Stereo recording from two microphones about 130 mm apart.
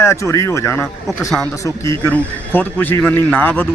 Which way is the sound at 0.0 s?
20° left (ahead or behind).